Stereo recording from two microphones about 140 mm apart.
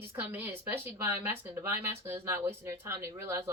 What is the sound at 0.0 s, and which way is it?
Speech, 15° right (ahead or behind).